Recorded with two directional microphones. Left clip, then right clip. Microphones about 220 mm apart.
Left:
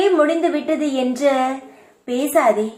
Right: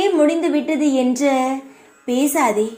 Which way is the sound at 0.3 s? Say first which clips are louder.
Even; 25° right (ahead or behind).